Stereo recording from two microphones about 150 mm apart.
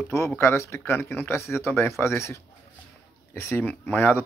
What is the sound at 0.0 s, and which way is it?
Speech, 20° left (ahead or behind).